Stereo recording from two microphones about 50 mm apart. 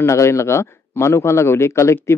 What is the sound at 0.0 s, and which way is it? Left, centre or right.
Speech, left.